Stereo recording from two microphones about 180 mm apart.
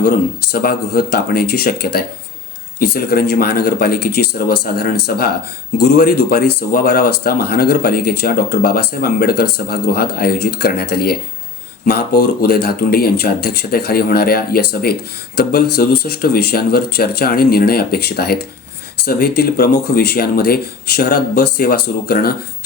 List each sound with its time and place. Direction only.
0.5 s speech: 55° left (ahead or behind)